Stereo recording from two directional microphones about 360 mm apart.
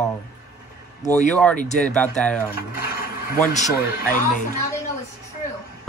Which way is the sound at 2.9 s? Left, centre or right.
Left.